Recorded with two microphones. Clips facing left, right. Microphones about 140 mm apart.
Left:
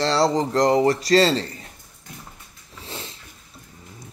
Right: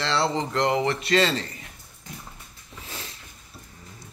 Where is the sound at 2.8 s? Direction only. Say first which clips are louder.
Left 4 dB; 25° left (ahead or behind).